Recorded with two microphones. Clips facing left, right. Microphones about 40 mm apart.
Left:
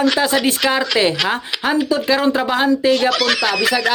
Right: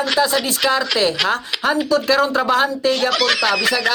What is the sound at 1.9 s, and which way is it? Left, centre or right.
Speech, centre.